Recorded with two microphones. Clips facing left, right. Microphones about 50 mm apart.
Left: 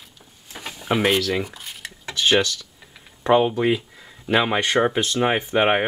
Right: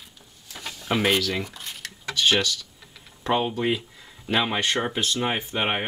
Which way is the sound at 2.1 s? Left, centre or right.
Left.